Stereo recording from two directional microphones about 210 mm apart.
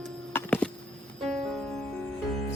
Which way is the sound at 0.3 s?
5° left (ahead or behind).